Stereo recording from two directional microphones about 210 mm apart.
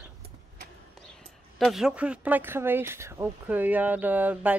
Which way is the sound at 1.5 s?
Centre (ahead or behind).